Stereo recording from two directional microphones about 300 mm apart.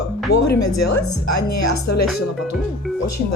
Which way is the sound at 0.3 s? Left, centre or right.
Left.